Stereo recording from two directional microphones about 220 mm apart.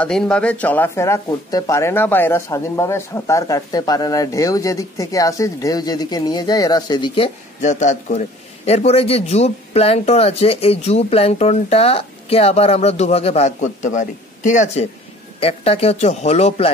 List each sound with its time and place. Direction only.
0.0 s speech: 5° left (ahead or behind)
7.6 s a man's voice: 30° left (ahead or behind)